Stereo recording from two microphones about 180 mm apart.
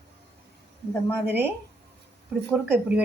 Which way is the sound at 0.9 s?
10° left (ahead or behind).